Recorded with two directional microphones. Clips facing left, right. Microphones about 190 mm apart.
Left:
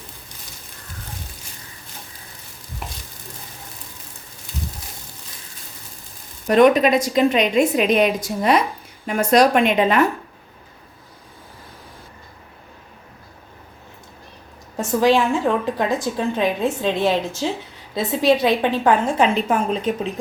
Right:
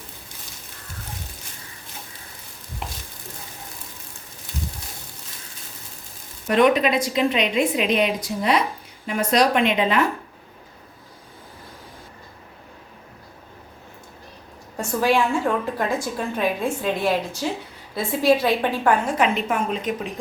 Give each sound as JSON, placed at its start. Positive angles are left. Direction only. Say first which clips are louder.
{"t": 6.5, "sound": "a woman's voice", "louder": "left 4 dB", "side_deg": 45}
{"t": 14.8, "sound": "a woman's voice", "louder": "left 4 dB", "side_deg": 20}